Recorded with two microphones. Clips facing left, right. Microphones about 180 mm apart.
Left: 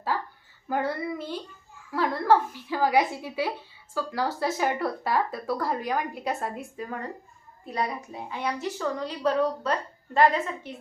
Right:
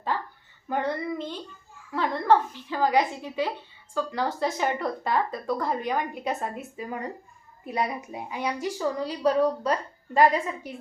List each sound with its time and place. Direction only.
0.7 s a woman's voice: 5° left (ahead or behind)
7.7 s a woman's voice: 20° right (ahead or behind)